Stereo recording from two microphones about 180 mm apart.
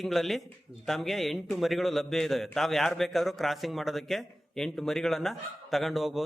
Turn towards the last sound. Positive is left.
turn(degrees=0)  # may be behind; listen again after turning